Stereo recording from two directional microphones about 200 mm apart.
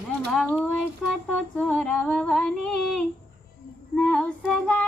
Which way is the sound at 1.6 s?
5° left (ahead or behind).